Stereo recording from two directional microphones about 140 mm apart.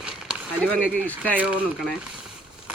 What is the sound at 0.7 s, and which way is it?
Speech, 10° left (ahead or behind).